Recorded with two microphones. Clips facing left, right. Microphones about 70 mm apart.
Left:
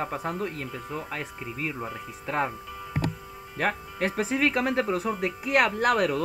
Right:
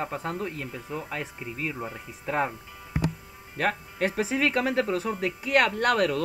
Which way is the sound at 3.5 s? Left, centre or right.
Centre.